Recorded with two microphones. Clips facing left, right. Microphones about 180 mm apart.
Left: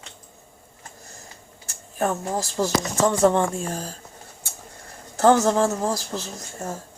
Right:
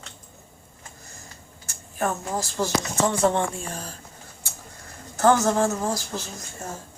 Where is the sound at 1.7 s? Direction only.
35° left (ahead or behind).